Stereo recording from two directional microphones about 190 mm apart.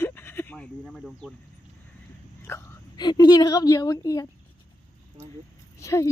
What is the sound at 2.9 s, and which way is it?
A woman's voice, 20° left (ahead or behind).